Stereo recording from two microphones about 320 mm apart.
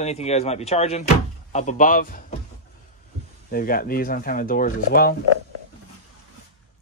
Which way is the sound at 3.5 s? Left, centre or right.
Left.